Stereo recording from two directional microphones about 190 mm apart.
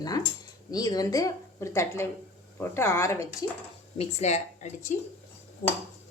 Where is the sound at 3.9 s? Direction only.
35° left (ahead or behind).